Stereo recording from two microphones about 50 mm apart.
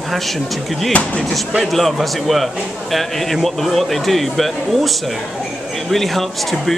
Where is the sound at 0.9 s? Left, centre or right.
Centre.